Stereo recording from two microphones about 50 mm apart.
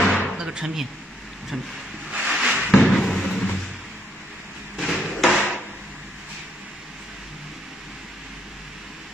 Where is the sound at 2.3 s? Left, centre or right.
Centre.